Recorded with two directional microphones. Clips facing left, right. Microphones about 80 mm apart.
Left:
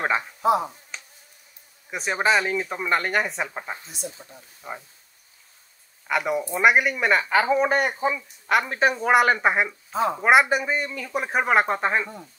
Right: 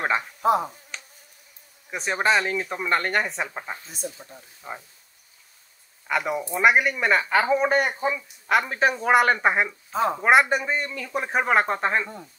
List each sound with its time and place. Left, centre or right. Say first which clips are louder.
0.4 s speech: even; right
1.9 s speech: even; centre
6.0 s speech: left 1 dB; centre